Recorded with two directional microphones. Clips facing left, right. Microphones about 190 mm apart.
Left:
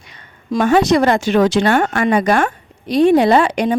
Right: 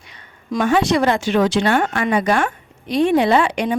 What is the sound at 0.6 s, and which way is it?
Speech, 40° left (ahead or behind).